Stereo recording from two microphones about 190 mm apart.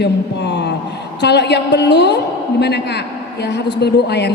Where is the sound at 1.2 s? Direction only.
65° left (ahead or behind).